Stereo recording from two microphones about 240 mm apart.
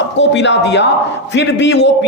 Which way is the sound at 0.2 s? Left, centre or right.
Left.